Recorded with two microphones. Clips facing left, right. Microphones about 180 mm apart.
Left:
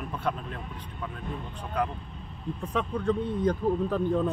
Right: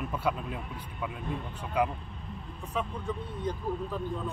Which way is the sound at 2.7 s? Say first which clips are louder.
Left 6 dB; 70° left (ahead or behind).